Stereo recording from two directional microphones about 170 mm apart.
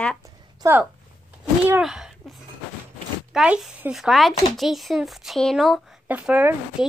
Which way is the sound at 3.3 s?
5° right (ahead or behind).